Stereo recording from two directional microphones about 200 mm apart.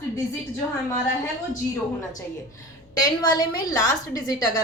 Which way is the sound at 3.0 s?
20° left (ahead or behind).